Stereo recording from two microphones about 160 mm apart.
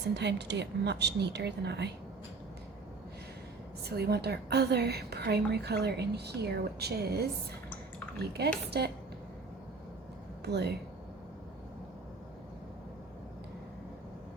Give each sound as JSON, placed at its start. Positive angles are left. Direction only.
{"t": 0.1, "sound": "a woman's voice", "side_deg": -90}
{"t": 3.8, "sound": "a woman's voice", "side_deg": -85}
{"t": 10.4, "sound": "a woman's voice", "side_deg": -90}